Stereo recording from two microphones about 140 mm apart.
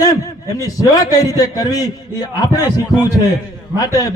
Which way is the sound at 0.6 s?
25° left (ahead or behind).